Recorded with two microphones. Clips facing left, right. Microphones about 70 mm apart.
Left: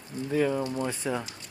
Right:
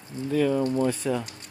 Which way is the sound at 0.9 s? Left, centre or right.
Centre.